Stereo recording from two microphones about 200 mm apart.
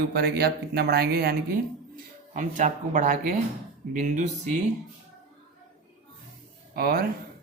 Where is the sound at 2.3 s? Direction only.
40° right (ahead or behind).